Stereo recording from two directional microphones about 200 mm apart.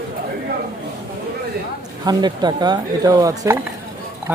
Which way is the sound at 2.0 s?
20° right (ahead or behind).